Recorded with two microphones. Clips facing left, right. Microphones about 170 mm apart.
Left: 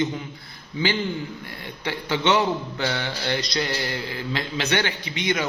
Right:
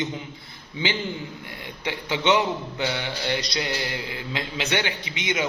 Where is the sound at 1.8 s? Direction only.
15° right (ahead or behind).